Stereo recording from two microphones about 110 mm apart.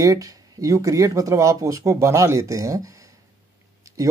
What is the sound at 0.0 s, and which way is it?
A man's voice, 30° right (ahead or behind).